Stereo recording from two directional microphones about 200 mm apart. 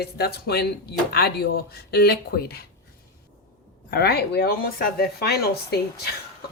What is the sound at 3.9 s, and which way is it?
Speech, 50° left (ahead or behind).